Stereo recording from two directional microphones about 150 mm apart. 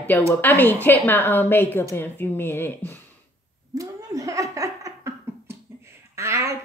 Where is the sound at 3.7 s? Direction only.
20° right (ahead or behind).